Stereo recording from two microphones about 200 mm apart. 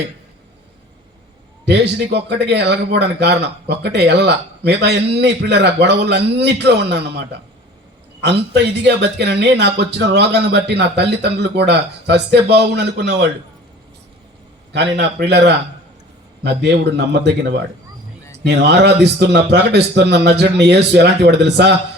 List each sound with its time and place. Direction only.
1.6 s speech: 55° right (ahead or behind)
14.7 s speech: 60° right (ahead or behind)